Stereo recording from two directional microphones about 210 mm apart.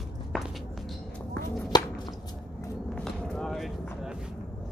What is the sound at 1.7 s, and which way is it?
Chop, 20° left (ahead or behind).